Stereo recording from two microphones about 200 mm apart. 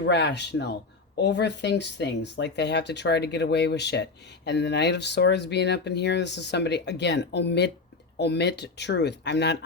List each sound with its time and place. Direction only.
0.0 s speech: 60° left (ahead or behind)